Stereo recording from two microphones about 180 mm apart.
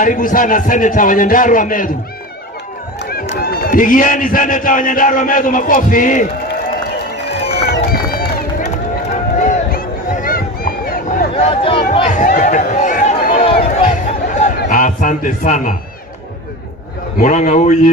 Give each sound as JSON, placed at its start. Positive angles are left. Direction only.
{"t": 0.0, "sound": "a man's voice", "side_deg": 50}
{"t": 3.3, "sound": "a man's voice", "side_deg": 55}
{"t": 7.7, "sound": "run", "side_deg": 60}
{"t": 8.6, "sound": "run", "side_deg": 40}
{"t": 11.3, "sound": "speech", "side_deg": 30}
{"t": 11.9, "sound": "a sound", "side_deg": 40}
{"t": 17.2, "sound": "a man's voice", "side_deg": 45}